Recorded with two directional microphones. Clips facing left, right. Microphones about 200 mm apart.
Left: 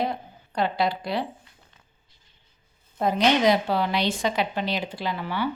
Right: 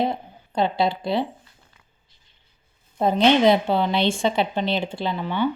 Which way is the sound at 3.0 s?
25° right (ahead or behind).